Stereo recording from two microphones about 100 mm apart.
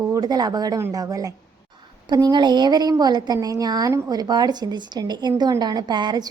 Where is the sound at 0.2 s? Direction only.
40° right (ahead or behind).